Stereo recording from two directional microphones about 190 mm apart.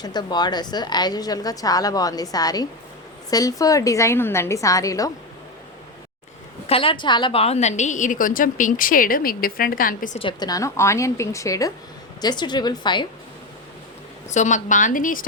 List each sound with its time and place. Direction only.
0.0 s a woman's voice: 20° left (ahead or behind)
6.7 s a woman's voice: 30° left (ahead or behind); by 10.2 s 45° left (ahead or behind)
10.2 s a woman's voice: 25° left (ahead or behind)
14.3 s a woman's voice: 40° left (ahead or behind)